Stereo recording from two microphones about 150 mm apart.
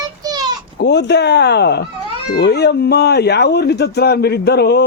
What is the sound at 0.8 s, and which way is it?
Speech, 90° left.